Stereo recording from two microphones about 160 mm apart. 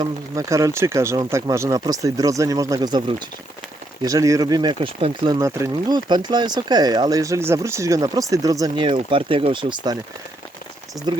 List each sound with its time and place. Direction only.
0.0 s speech: 20° right (ahead or behind)